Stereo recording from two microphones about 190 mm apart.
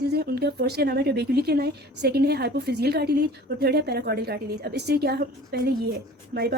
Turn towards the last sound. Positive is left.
turn(degrees=-55)  # may be behind; listen again after turning